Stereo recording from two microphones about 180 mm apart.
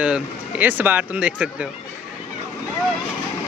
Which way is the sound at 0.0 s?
10° right (ahead or behind).